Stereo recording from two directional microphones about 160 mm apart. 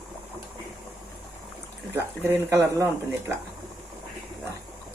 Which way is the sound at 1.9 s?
15° right (ahead or behind).